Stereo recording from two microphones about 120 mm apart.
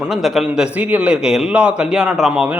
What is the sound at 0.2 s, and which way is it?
A man's voice, 5° right (ahead or behind).